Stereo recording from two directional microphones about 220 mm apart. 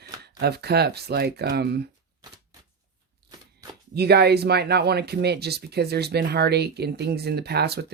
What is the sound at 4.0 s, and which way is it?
Speech, 45° right (ahead or behind).